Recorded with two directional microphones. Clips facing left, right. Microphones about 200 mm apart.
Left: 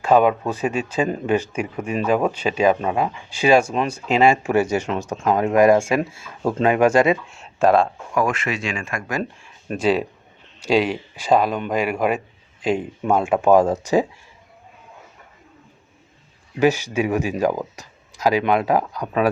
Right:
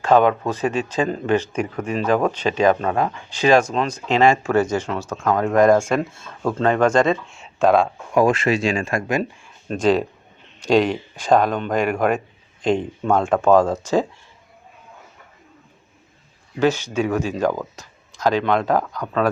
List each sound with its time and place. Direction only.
0.0 s speech: 10° left (ahead or behind)
8.1 s speech: 30° right (ahead or behind)
9.4 s a man's voice: 5° left (ahead or behind)
16.6 s speech: 15° left (ahead or behind)